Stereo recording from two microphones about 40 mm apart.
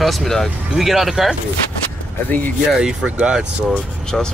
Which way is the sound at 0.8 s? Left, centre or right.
Centre.